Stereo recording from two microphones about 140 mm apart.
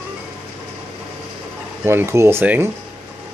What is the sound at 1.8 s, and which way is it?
Speech, 20° right (ahead or behind).